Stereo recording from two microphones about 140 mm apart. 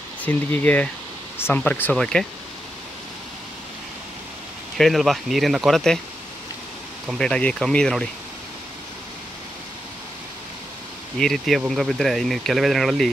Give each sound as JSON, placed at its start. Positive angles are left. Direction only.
{"t": 0.2, "sound": "speech", "side_deg": 10}
{"t": 4.7, "sound": "speech", "side_deg": 0}
{"t": 7.2, "sound": "speech", "side_deg": 5}
{"t": 11.1, "sound": "speech", "side_deg": 0}